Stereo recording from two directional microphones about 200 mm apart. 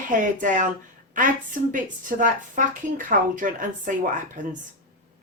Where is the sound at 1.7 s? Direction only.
40° right (ahead or behind).